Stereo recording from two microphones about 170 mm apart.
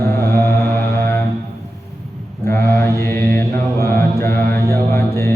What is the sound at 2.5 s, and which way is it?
Mantra, 15° left (ahead or behind).